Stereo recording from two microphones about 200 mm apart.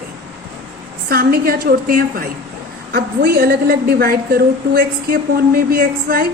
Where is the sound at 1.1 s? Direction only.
50° right (ahead or behind).